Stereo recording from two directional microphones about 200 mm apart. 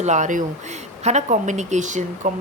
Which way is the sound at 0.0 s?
35° right (ahead or behind).